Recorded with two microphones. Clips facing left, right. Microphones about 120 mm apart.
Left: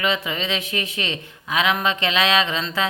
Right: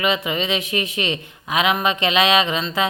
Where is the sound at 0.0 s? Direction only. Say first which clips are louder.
Right 3 dB; 15° right (ahead or behind).